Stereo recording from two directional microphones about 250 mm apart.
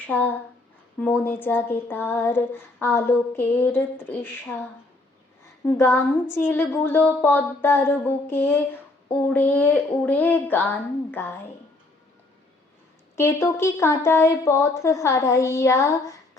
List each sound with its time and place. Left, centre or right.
0.1 s speech: centre
5.6 s speech: centre
13.1 s speech: centre